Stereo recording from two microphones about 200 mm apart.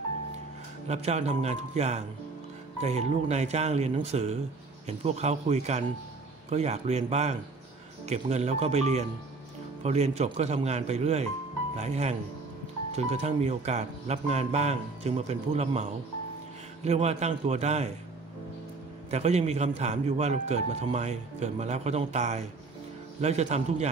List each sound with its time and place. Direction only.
0.8 s speech: 30° right (ahead or behind)
19.0 s speech: 35° right (ahead or behind)